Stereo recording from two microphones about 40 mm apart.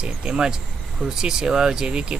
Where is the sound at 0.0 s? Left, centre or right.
Right.